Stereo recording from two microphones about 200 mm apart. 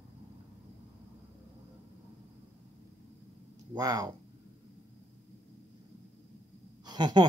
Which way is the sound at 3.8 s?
20° right (ahead or behind).